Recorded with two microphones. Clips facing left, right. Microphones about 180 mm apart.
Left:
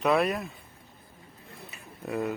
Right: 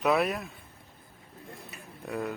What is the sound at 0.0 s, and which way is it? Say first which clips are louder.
Speech: left 1 dB; centre (ahead or behind).